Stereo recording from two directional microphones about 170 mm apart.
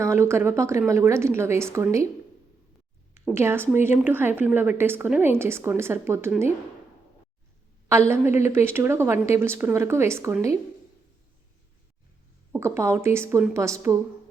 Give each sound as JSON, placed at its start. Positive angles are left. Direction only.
{"t": 0.0, "sound": "a woman's voice", "side_deg": -15}
{"t": 3.3, "sound": "a woman's voice", "side_deg": -15}
{"t": 7.9, "sound": "a woman's voice", "side_deg": -15}
{"t": 12.5, "sound": "a woman's voice", "side_deg": -15}